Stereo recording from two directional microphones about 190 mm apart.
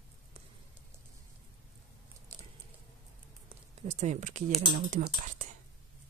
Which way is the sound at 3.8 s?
35° right (ahead or behind).